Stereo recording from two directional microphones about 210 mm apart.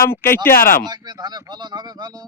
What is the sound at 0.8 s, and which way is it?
Speech, 20° right (ahead or behind).